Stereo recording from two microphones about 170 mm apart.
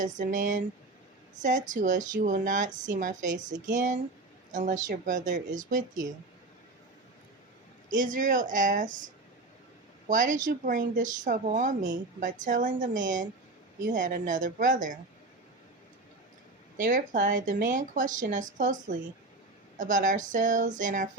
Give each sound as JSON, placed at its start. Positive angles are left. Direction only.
{"t": 0.0, "sound": "speech", "side_deg": -50}
{"t": 7.9, "sound": "speech", "side_deg": -50}
{"t": 10.1, "sound": "speech", "side_deg": -50}
{"t": 16.7, "sound": "speech", "side_deg": -50}